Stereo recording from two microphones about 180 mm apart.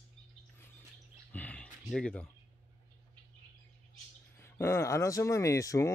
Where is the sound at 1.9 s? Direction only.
5° left (ahead or behind).